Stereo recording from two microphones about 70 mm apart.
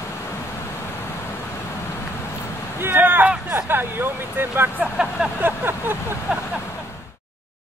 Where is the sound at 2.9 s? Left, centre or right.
Right.